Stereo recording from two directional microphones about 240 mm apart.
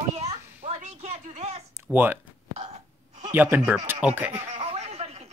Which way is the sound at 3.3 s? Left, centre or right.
Centre.